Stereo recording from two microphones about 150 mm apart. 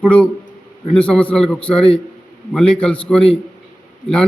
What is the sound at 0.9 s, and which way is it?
A man's voice, 5° left (ahead or behind).